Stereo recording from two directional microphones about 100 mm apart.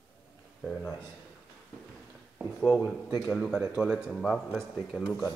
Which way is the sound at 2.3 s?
Centre (ahead or behind).